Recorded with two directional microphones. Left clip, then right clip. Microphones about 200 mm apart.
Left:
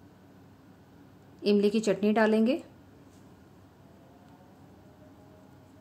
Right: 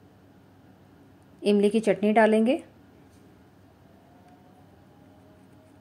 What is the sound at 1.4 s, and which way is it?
A woman's voice, 10° right (ahead or behind).